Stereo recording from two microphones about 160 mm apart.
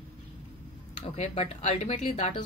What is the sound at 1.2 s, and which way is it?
Speech, 40° left (ahead or behind).